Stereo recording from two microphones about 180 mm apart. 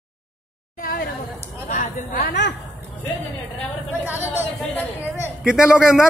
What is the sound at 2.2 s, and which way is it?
Speech, 70° left (ahead or behind).